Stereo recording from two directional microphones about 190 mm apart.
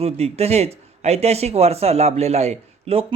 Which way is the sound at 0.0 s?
35° right (ahead or behind).